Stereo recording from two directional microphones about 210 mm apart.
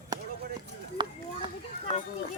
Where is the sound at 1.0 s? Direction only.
20° right (ahead or behind).